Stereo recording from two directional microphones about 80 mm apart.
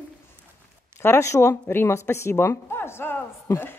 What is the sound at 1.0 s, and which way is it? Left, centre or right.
A woman's voice, left.